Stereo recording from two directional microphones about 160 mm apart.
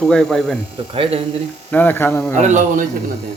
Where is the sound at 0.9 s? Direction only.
35° right (ahead or behind).